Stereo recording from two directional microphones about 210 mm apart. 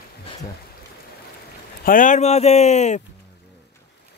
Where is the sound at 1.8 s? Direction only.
40° left (ahead or behind).